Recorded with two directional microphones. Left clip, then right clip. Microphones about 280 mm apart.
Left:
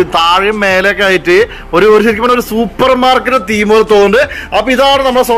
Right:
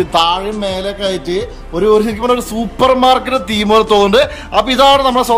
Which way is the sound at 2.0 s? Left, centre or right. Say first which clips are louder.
Left 5 dB; centre.